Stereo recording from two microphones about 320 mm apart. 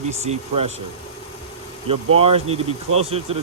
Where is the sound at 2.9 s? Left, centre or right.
Right.